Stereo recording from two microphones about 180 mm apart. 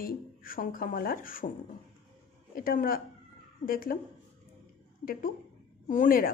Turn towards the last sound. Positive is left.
turn(degrees=50)  # may be behind; listen again after turning